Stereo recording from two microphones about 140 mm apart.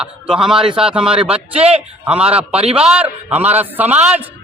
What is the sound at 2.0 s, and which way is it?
A man's voice, 10° right (ahead or behind).